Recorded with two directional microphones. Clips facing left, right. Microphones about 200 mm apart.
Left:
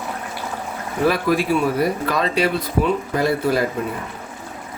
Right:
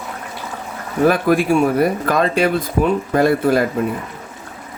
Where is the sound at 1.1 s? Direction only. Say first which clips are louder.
Right 3 dB; 50° right (ahead or behind).